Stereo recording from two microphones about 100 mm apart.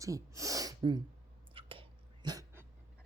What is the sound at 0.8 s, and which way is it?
Speech, 45° right (ahead or behind).